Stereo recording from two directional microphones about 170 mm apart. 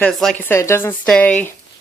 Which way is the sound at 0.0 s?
5° left (ahead or behind).